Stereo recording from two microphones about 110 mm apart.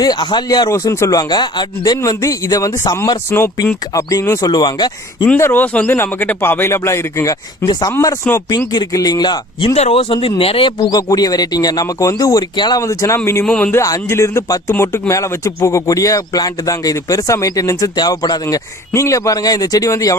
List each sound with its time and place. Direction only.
0.0 s speech: 40° left (ahead or behind)
0.7 s speech: 25° left (ahead or behind)
5.2 s speech: 20° left (ahead or behind)
7.6 s speech: 45° left (ahead or behind)
7.9 s speech: 30° left (ahead or behind); by 9.7 s 45° left (ahead or behind)
9.7 s speech: 65° left (ahead or behind)
10.8 s speech: 35° left (ahead or behind)
12.8 s speech: 25° left (ahead or behind)
13.4 s speech: 10° left (ahead or behind)
13.7 s speech: 30° left (ahead or behind)